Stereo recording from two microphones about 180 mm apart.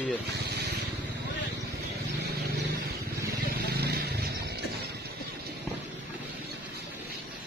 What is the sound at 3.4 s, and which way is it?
Vehicle, 60° right (ahead or behind).